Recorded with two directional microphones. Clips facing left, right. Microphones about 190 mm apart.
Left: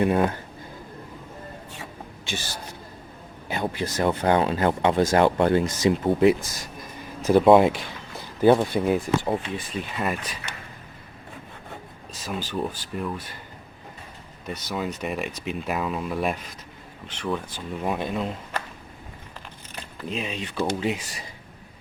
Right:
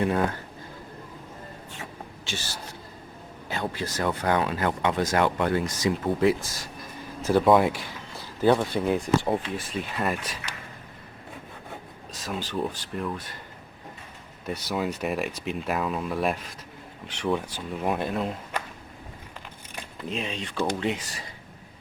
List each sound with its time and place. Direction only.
2.2 s speech: 15° left (ahead or behind)
3.5 s speech: 15° left (ahead or behind); by 10.3 s centre (ahead or behind)
12.2 s speech: centre (ahead or behind)
14.4 s speech: 5° right (ahead or behind)
17.1 s speech: 15° right (ahead or behind)
20.1 s speech: centre (ahead or behind)